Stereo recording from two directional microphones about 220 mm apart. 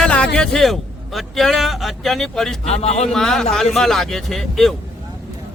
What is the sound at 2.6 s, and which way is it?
Speech, 30° left (ahead or behind).